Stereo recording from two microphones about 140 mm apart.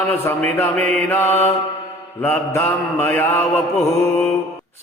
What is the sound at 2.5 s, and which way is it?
Mantra, 15° left (ahead or behind).